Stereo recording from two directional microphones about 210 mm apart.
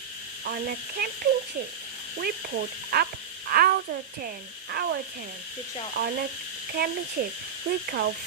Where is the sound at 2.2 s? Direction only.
50° right (ahead or behind).